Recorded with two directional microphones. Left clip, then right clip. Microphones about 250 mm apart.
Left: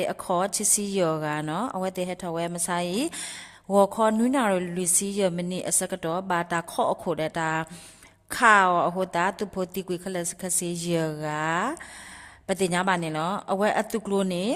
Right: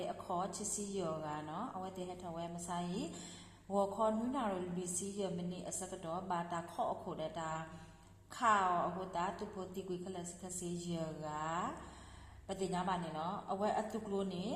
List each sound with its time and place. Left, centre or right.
0.3 s a woman's voice: left